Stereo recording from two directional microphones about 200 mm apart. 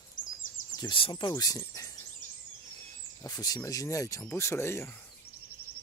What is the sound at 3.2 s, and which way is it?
Speech, 20° left (ahead or behind).